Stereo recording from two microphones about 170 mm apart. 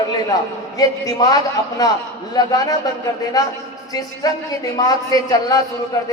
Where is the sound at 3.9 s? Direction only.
20° left (ahead or behind).